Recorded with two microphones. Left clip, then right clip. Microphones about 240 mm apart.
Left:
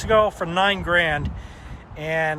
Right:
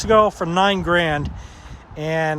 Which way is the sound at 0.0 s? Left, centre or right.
Right.